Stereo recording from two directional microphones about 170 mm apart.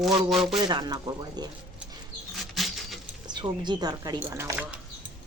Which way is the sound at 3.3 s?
25° right (ahead or behind).